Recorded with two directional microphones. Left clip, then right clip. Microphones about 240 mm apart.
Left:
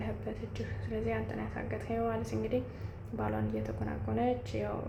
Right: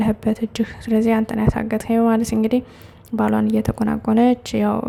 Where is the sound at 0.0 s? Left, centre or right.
Right.